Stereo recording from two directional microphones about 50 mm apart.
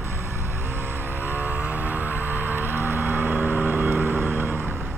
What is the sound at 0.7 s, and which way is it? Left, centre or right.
Vehicle, right.